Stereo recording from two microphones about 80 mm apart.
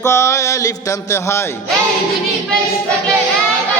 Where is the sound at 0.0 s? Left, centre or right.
Left.